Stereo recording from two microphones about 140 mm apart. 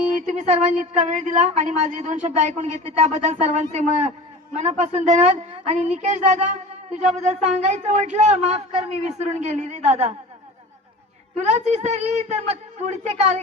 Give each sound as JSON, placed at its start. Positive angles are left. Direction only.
{"t": 0.1, "sound": "a woman's voice", "side_deg": -60}
{"t": 11.3, "sound": "a woman's voice", "side_deg": -55}